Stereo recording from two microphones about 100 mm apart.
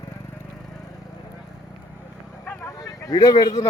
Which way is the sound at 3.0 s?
40° left (ahead or behind).